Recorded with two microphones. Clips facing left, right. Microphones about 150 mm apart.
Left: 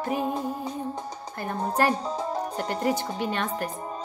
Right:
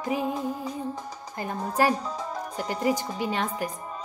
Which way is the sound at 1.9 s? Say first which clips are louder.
Left 2 dB; 30° left (ahead or behind).